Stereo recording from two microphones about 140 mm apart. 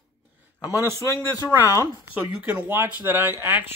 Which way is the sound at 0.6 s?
20° right (ahead or behind).